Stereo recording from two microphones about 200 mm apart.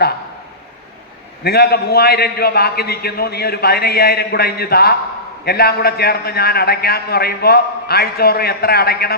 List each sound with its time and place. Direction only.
1.5 s a man's voice: 50° left (ahead or behind)